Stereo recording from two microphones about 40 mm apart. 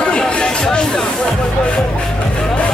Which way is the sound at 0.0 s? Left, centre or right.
Left.